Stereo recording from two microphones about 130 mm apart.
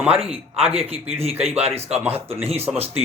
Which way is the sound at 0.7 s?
50° right (ahead or behind).